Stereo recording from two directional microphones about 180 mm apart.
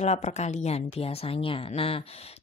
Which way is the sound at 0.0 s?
40° left (ahead or behind).